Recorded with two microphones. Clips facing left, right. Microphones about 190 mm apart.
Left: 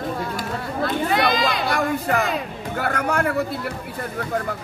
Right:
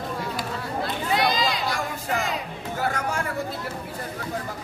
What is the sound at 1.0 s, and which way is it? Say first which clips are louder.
Music: left 2 dB; 55° left (ahead or behind).